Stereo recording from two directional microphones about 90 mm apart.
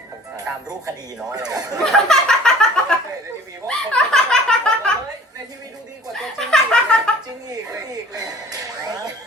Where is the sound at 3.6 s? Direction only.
10° left (ahead or behind).